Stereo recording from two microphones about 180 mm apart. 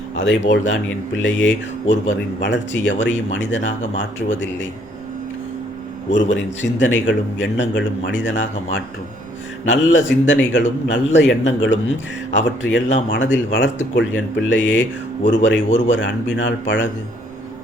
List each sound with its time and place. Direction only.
0.2 s a man's voice: 90° left
6.7 s a man's voice: 90° left
9.6 s a man's voice: 90° left